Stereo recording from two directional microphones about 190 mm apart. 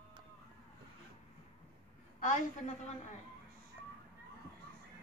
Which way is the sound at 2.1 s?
40° left (ahead or behind).